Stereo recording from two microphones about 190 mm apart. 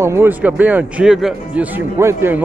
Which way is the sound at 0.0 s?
15° right (ahead or behind).